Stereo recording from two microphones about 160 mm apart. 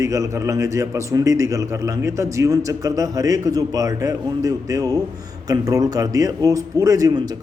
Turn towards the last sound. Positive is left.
turn(degrees=-20)  # may be behind; listen again after turning